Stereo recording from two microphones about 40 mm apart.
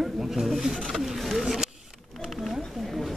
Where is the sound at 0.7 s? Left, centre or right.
Centre.